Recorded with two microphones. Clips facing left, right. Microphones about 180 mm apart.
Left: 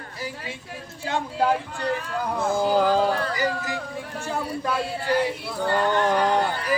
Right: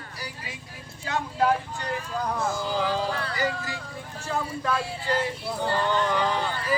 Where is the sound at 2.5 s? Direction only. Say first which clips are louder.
Left 11 dB; 55° left (ahead or behind).